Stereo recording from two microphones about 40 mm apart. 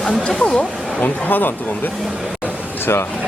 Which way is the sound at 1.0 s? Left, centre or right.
Left.